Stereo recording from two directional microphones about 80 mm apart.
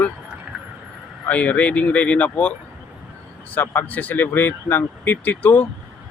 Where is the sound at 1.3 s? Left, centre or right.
Centre.